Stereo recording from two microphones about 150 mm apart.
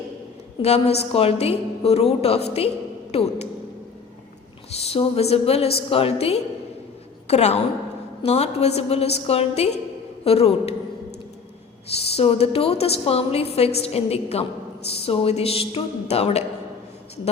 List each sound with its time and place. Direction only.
0.6 s a woman's voice: 45° left (ahead or behind)
4.7 s a woman's voice: 45° left (ahead or behind)
11.9 s a woman's voice: 40° left (ahead or behind)